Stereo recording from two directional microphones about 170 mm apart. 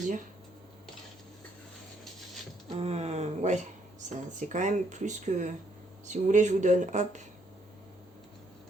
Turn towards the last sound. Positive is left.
turn(degrees=-45)  # may be behind; listen again after turning